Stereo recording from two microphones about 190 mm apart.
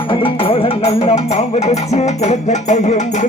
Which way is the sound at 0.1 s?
25° left (ahead or behind).